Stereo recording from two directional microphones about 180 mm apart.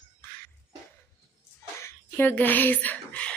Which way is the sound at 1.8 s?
10° left (ahead or behind).